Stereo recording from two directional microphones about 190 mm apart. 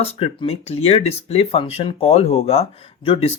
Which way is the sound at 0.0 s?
30° left (ahead or behind).